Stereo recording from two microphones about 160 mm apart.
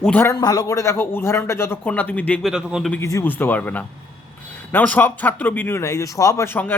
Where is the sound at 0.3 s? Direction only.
20° left (ahead or behind).